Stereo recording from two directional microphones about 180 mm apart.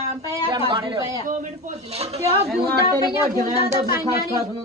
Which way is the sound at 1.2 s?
40° right (ahead or behind).